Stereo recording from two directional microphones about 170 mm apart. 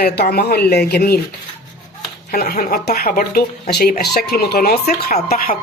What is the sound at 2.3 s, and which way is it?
A woman's voice, 55° left (ahead or behind).